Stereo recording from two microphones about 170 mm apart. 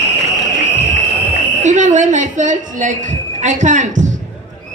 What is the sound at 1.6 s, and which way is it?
A man's voice, 45° right (ahead or behind).